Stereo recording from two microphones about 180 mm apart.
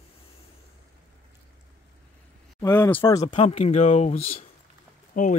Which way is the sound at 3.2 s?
35° left (ahead or behind).